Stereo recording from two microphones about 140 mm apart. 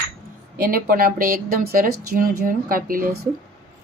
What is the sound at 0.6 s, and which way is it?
Speech, 85° right.